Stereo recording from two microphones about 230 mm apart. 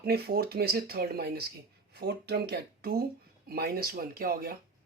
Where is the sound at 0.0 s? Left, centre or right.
Right.